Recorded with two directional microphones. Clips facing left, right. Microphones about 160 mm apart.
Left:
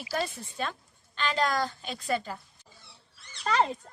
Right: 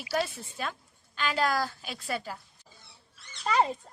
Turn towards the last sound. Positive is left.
turn(degrees=-5)  # may be behind; listen again after turning